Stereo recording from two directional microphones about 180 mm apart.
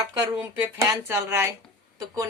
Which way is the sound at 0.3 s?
15° right (ahead or behind).